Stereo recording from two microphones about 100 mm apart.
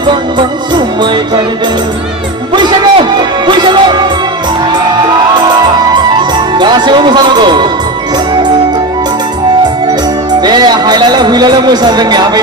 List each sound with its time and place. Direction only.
0.1 s speech: 50° right (ahead or behind)
2.5 s music: 50° right (ahead or behind)
6.6 s speech: 45° right (ahead or behind)
10.4 s speech: 45° right (ahead or behind)